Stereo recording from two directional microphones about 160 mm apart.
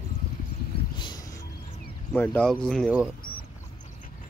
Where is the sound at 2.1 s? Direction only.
10° left (ahead or behind).